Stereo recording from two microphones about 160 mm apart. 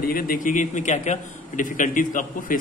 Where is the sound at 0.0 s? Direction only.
60° left (ahead or behind).